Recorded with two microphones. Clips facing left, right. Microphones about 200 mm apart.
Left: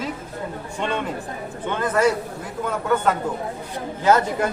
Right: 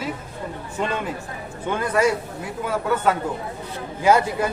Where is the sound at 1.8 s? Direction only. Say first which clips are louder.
Left 1 dB; 10° right (ahead or behind).